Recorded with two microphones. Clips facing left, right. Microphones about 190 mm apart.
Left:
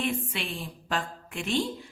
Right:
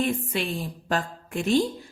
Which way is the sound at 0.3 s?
40° right (ahead or behind).